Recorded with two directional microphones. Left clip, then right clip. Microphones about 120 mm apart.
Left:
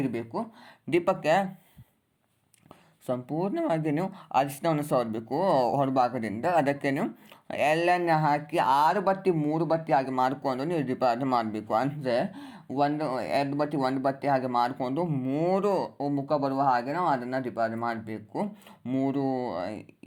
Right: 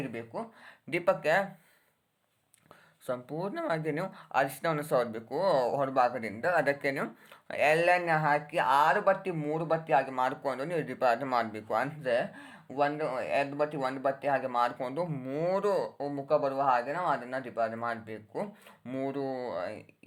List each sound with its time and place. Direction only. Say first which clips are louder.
0.0 s speech: left 6 dB; 30° left (ahead or behind)
3.1 s speech: left 5 dB; 20° left (ahead or behind)